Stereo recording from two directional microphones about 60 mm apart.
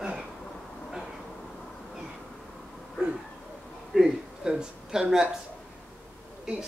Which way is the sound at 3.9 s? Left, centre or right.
Centre.